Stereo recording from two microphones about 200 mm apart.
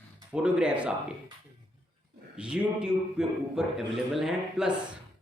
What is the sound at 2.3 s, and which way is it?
A man's voice, 5° right (ahead or behind).